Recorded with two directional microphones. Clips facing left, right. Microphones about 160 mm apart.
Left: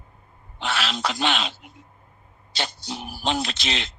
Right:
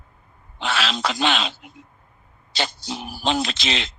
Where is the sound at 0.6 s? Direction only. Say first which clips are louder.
Right 2 dB; 90° right.